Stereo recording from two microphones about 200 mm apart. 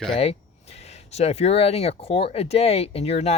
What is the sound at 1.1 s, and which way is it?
Speech, 30° left (ahead or behind).